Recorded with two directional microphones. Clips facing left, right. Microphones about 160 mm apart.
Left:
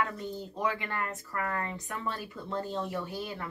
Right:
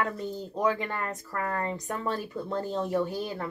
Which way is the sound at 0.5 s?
40° right (ahead or behind).